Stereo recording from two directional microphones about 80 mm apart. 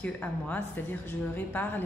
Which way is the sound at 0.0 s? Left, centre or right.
Centre.